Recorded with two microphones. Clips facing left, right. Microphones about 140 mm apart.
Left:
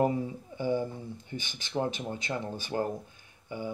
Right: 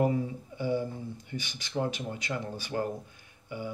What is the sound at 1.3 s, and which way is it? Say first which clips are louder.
Speech: left 1 dB; 25° left (ahead or behind).